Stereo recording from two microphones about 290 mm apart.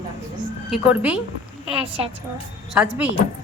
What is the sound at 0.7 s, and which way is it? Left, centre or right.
Speech, centre.